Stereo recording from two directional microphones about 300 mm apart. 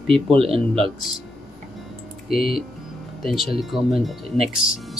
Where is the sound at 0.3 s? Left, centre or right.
Centre.